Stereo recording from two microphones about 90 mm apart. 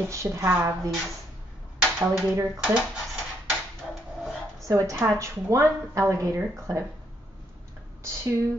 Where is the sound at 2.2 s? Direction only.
30° right (ahead or behind).